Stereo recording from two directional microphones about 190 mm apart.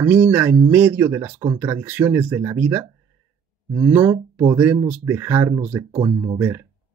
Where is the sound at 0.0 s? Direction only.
10° right (ahead or behind).